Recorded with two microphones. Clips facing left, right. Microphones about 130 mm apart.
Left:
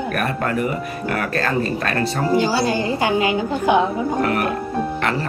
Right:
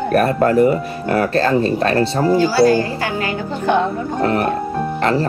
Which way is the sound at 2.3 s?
20° left (ahead or behind).